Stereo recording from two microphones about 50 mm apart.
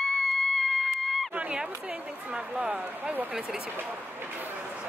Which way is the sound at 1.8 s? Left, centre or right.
Right.